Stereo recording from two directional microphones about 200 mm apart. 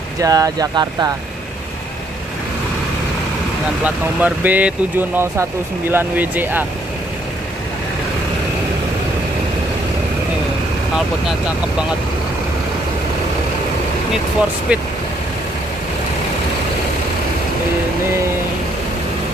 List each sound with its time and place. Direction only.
0.2 s speech: 20° right (ahead or behind)
3.8 s speech: 10° right (ahead or behind)
14.7 s speech: 5° right (ahead or behind)